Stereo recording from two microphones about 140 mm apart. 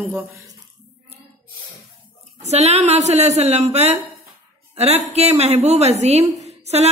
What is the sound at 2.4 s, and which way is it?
Speech, 50° right (ahead or behind).